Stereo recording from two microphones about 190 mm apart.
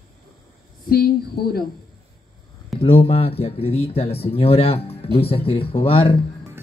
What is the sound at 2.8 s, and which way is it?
Speech, 30° left (ahead or behind).